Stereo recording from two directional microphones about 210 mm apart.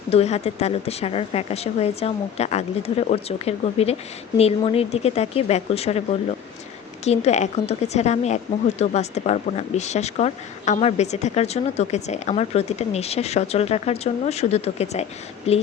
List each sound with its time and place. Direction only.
0.1 s a woman's voice: 30° left (ahead or behind)
7.0 s a woman's voice: 30° left (ahead or behind)